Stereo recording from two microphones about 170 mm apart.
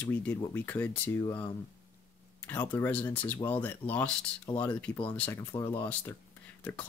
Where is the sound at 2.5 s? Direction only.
10° left (ahead or behind).